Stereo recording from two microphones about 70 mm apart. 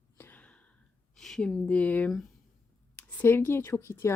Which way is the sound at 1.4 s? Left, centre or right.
Centre.